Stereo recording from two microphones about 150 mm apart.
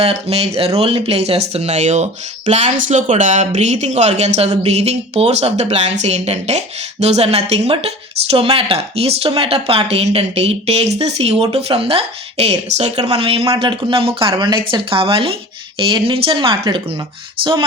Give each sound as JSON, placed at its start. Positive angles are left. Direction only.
{"t": 0.0, "sound": "speech", "side_deg": -45}